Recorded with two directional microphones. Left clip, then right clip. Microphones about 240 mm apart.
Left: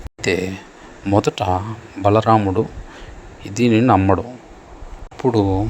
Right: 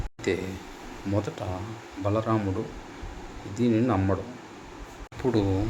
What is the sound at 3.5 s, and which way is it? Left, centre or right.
Speech, left.